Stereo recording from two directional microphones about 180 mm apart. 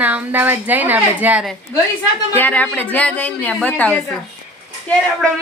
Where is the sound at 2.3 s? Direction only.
10° left (ahead or behind).